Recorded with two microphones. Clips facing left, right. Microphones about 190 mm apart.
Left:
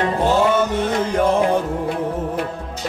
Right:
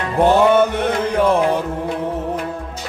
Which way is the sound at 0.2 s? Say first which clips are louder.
Right 6 dB; 60° right (ahead or behind).